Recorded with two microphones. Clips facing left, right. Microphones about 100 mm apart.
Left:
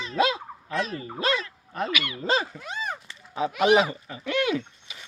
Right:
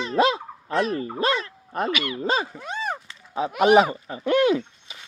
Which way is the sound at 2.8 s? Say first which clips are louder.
Right 4 dB; 30° right (ahead or behind).